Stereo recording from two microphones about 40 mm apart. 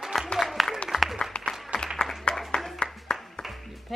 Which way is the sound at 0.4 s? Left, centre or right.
Centre.